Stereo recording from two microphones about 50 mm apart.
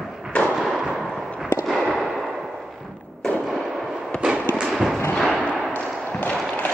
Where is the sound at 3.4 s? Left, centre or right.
Centre.